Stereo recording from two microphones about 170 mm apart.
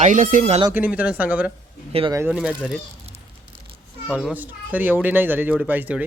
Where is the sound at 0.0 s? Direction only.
50° right (ahead or behind).